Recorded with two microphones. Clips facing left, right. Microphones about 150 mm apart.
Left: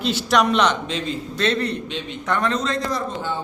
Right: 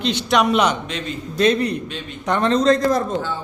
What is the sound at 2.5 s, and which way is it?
Speech, 45° right (ahead or behind).